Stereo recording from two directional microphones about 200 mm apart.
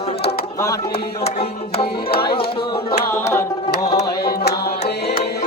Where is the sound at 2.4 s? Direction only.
25° left (ahead or behind).